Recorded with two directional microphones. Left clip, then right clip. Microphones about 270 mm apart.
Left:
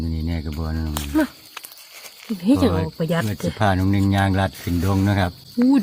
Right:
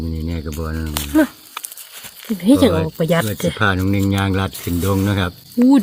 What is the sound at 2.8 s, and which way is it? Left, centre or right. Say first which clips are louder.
Speech: right 6 dB; right.